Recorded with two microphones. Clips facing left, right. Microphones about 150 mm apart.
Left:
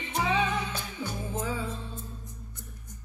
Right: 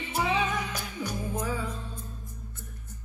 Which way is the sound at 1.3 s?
25° left (ahead or behind).